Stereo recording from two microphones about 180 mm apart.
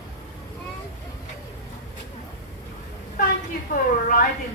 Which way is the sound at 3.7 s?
50° left (ahead or behind).